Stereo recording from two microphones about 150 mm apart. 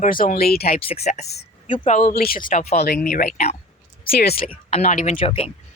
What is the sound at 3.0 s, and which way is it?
Speech, 70° left (ahead or behind).